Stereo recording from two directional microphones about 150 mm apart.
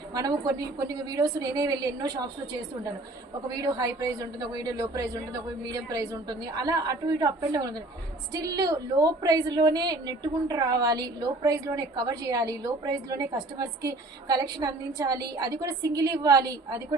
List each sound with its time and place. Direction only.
0.1 s a woman's voice: 25° right (ahead or behind)
3.5 s a woman's voice: 25° right (ahead or behind)